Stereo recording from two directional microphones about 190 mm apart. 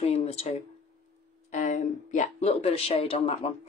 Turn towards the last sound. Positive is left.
turn(degrees=30)  # may be behind; listen again after turning